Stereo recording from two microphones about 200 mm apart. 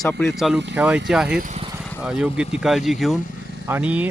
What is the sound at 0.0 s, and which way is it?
Speech, 5° left (ahead or behind).